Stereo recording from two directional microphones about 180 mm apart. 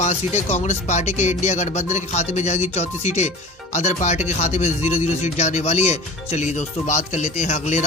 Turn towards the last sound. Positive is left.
turn(degrees=40)  # may be behind; listen again after turning